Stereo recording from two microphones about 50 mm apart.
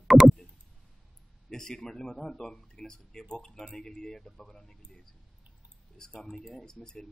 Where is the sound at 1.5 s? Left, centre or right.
Centre.